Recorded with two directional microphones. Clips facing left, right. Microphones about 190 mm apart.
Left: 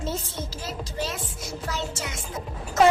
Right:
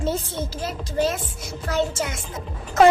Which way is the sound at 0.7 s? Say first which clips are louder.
Right 9 dB; 50° right (ahead or behind).